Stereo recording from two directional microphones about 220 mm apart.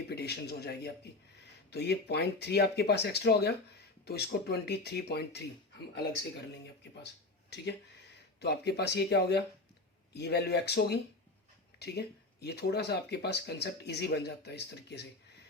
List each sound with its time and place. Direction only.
0.1 s a man's voice: 45° left (ahead or behind)
7.5 s speech: 50° left (ahead or behind)